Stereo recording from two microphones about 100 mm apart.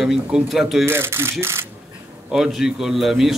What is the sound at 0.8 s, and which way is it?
Speech, 25° right (ahead or behind).